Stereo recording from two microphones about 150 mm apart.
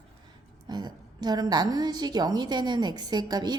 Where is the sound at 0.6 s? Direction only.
25° right (ahead or behind).